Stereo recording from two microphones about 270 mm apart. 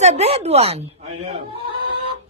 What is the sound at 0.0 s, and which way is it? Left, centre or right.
Speech, right.